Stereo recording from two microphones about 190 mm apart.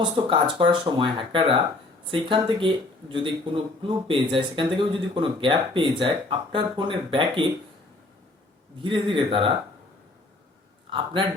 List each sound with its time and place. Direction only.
0.0 s speech: 25° right (ahead or behind)
8.8 s speech: 25° right (ahead or behind)
10.8 s a man's voice: 25° right (ahead or behind)